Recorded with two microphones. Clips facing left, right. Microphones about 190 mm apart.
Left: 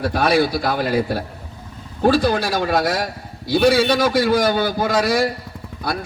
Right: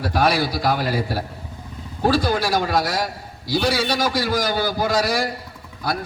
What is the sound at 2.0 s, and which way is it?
A man's voice, 60° left (ahead or behind).